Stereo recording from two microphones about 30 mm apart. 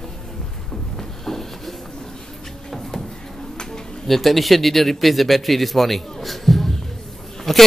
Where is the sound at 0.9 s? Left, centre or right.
Centre.